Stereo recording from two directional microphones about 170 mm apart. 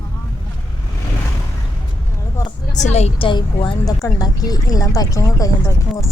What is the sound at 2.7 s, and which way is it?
Speech, 45° left (ahead or behind).